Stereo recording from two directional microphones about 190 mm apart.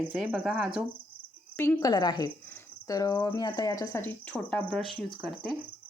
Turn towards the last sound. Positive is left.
turn(degrees=5)  # may be behind; listen again after turning